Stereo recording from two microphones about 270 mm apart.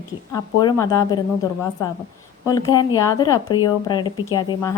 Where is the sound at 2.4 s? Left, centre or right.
Centre.